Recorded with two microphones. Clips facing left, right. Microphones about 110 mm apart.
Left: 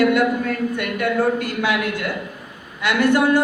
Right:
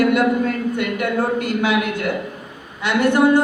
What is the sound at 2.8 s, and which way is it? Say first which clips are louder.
Speech: right 1 dB; 20° right (ahead or behind).